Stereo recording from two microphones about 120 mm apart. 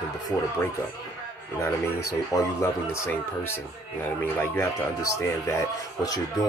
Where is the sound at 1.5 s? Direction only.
20° left (ahead or behind).